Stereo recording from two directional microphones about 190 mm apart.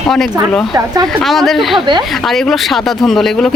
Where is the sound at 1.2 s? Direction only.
Centre (ahead or behind).